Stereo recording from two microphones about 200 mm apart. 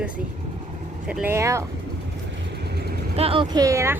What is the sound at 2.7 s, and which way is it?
Vehicle, 55° right (ahead or behind).